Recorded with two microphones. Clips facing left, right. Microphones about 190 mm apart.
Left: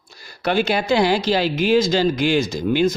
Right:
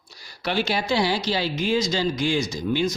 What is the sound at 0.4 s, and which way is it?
Speech, 55° left (ahead or behind).